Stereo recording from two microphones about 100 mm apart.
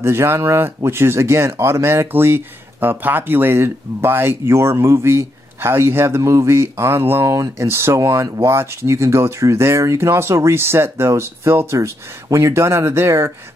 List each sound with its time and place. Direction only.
0.0 s speech: 25° right (ahead or behind)